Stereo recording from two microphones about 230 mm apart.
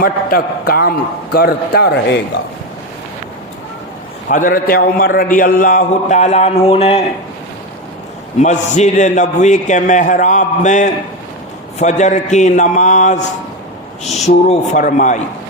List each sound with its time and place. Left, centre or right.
0.0 s a man's voice: left
4.3 s a man's voice: left
8.4 s a man's voice: left